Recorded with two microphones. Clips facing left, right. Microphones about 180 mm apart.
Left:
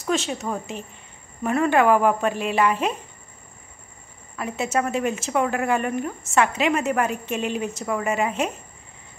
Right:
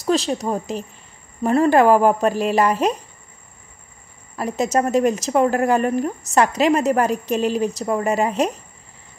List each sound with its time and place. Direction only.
0.0 s speech: 35° right (ahead or behind)
4.4 s speech: 40° right (ahead or behind)